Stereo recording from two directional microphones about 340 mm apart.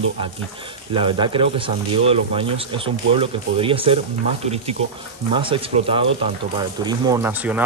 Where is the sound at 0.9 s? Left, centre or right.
Centre.